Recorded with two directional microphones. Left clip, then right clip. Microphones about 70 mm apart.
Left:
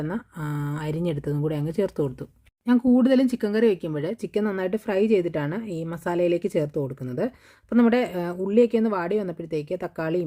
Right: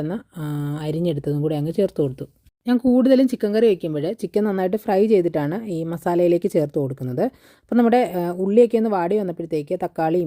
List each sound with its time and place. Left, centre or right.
0.0 s speech: right
3.6 s a woman's voice: right